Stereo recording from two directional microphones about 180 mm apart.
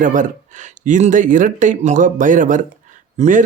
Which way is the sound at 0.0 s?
45° right (ahead or behind).